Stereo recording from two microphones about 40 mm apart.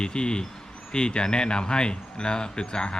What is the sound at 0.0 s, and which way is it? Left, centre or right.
Speech, left.